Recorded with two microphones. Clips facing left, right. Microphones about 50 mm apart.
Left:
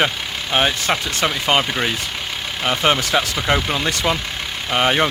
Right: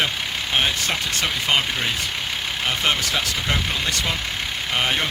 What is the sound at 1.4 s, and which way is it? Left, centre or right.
Speech, left.